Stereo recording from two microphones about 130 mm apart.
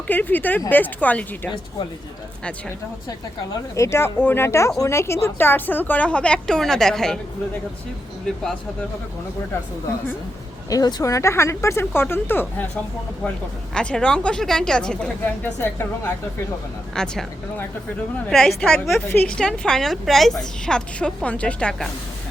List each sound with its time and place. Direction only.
0.1 s a woman's voice: 15° left (ahead or behind)
3.5 s a woman's voice: 20° left (ahead or behind); by 7.2 s 5° left (ahead or behind)
10.7 s speech: 30° left (ahead or behind)
13.7 s a woman's voice: 5° left (ahead or behind)
18.3 s a woman's voice: 5° left (ahead or behind)